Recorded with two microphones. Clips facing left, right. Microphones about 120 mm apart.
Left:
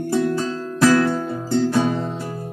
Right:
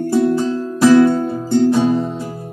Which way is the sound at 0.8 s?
20° right (ahead or behind).